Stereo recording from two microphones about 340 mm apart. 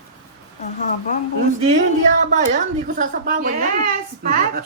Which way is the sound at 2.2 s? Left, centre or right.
Right.